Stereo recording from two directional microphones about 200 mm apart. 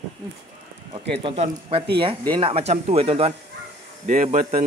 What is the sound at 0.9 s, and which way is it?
A man's voice, 25° right (ahead or behind).